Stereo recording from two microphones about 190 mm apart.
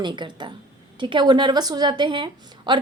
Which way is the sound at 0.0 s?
25° right (ahead or behind).